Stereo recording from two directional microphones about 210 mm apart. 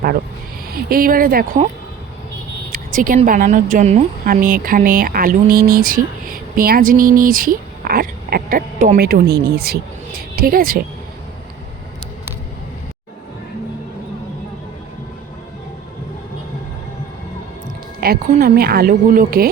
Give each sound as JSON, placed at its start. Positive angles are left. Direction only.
{"t": 0.7, "sound": "speech", "side_deg": -45}
{"t": 2.7, "sound": "speech", "side_deg": -40}
{"t": 18.0, "sound": "speech", "side_deg": -45}